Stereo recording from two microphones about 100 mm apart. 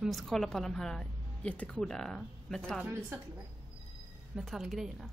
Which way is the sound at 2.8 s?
20° right (ahead or behind).